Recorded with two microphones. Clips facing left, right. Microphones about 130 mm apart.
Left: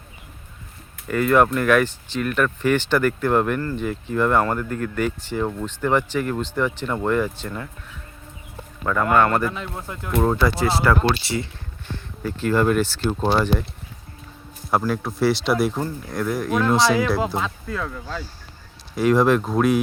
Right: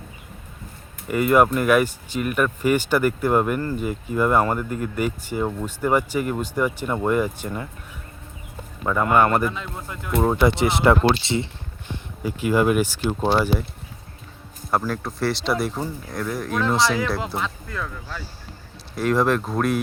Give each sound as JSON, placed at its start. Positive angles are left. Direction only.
{"t": 1.0, "sound": "speech", "side_deg": -10}
{"t": 8.8, "sound": "speech", "side_deg": -15}
{"t": 9.5, "sound": "speech", "side_deg": 20}
{"t": 10.3, "sound": "speech", "side_deg": -20}
{"t": 12.2, "sound": "speech", "side_deg": -10}
{"t": 14.7, "sound": "speech", "side_deg": 5}
{"t": 17.2, "sound": "speech", "side_deg": 20}
{"t": 18.9, "sound": "speech", "side_deg": 0}